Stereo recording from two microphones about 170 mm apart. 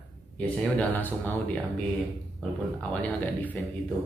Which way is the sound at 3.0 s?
10° left (ahead or behind).